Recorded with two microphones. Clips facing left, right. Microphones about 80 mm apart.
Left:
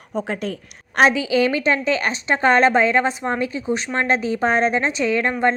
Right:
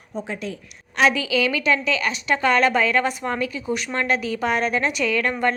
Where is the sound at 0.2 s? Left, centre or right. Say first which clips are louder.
Left 4 dB; left.